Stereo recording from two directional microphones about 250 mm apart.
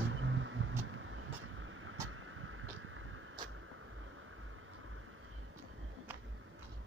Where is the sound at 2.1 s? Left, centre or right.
Right.